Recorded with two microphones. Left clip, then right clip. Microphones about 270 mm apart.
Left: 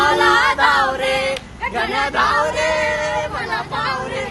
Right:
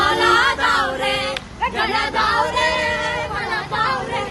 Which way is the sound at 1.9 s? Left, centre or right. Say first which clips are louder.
Left 4 dB; centre.